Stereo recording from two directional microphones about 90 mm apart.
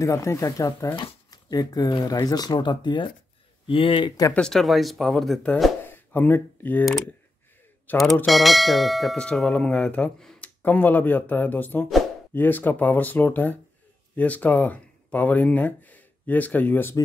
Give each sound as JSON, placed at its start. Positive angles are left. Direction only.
{"t": 0.0, "sound": "speech", "side_deg": 35}
{"t": 0.9, "sound": "speech", "side_deg": 50}
{"t": 3.6, "sound": "speech", "side_deg": 75}
{"t": 4.3, "sound": "speech", "side_deg": 10}
{"t": 5.9, "sound": "a sound", "side_deg": 25}
{"t": 7.9, "sound": "speech", "side_deg": 20}
{"t": 8.3, "sound": "speech", "side_deg": 0}